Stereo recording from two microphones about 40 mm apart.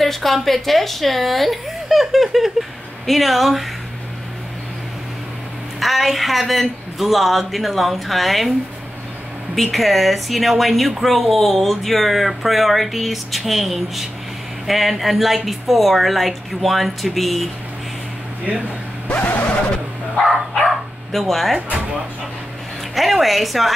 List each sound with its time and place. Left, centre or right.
0.0 s speech: centre
5.8 s speech: centre
9.6 s speech: centre
19.0 s vehicle: left
21.1 s speech: centre
21.5 s speech: right
22.9 s speech: centre